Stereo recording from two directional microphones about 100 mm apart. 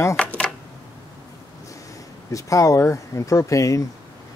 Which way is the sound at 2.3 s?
35° left (ahead or behind).